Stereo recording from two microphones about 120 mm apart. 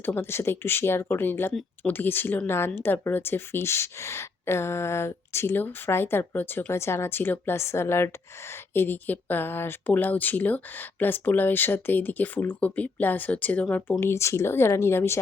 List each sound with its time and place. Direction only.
0.0 s speech: 20° left (ahead or behind)